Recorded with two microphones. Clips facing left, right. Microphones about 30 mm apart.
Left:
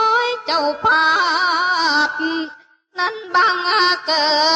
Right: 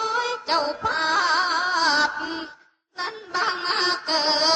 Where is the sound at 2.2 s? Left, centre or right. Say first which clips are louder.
Left 9 dB; left.